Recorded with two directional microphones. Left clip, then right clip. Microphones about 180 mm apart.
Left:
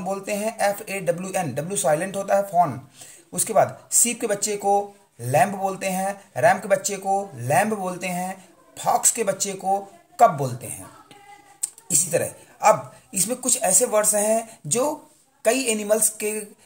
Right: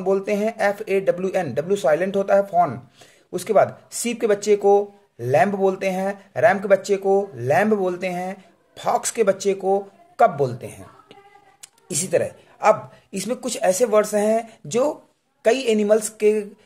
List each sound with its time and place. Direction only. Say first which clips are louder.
0.0 s speech: right 5 dB; 50° right (ahead or behind)